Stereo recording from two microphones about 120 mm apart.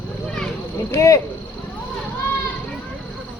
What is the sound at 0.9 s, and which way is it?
Speech, 25° left (ahead or behind).